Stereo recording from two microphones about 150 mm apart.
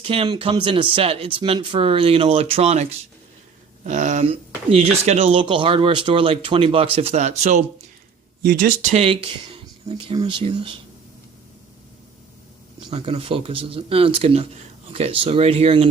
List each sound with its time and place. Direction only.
0.0 s speech: 40° right (ahead or behind)
8.4 s speech: 70° right (ahead or behind)
9.0 s speech: 35° right (ahead or behind)
12.9 s speech: 40° right (ahead or behind)